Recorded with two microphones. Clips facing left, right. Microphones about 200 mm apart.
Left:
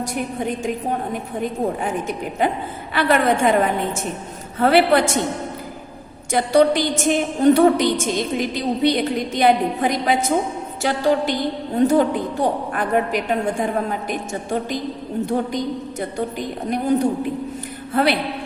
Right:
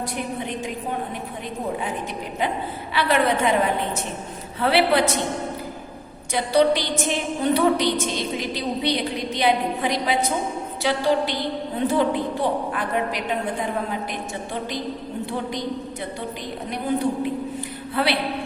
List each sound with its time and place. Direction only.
0.0 s a woman's voice: 45° left (ahead or behind)
4.6 s a woman's voice: 50° left (ahead or behind)
6.3 s a woman's voice: 50° left (ahead or behind)
17.9 s a woman's voice: 45° left (ahead or behind)